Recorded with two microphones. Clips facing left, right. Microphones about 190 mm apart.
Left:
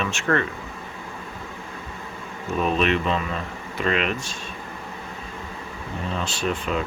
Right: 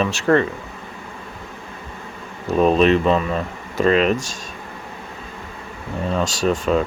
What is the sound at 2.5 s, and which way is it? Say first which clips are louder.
Speech: right 7 dB; 35° right (ahead or behind).